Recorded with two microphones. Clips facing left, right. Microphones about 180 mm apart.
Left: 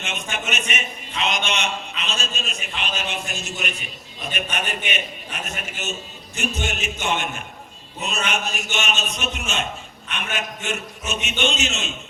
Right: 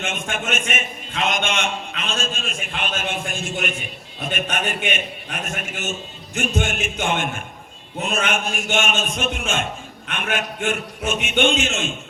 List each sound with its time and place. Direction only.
0.0 s a man's voice: 50° right (ahead or behind)
6.3 s a man's voice: 50° right (ahead or behind)